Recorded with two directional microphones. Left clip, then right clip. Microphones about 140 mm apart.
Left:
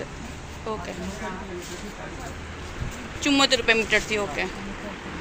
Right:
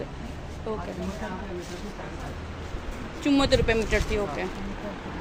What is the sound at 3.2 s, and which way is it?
Speech, 10° right (ahead or behind).